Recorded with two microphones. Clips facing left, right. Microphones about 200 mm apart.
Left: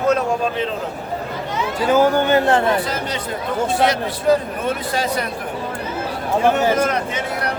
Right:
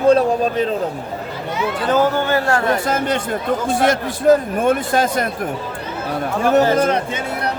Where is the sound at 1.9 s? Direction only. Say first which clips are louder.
Left 2 dB; 15° left (ahead or behind).